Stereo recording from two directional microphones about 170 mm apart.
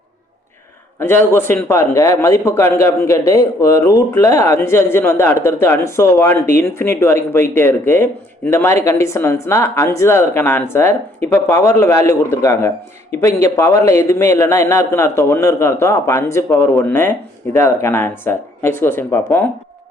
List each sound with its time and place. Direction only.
0.9 s speech: 15° left (ahead or behind)